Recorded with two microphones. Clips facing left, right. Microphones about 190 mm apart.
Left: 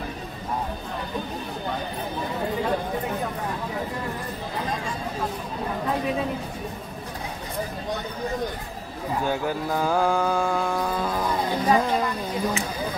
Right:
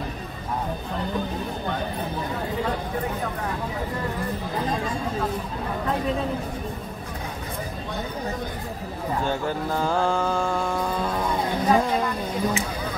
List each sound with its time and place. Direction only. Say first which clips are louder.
9.2 s mantra: left 1 dB; 10° left (ahead or behind)